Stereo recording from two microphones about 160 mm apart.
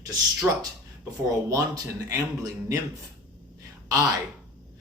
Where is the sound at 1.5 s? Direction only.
20° right (ahead or behind).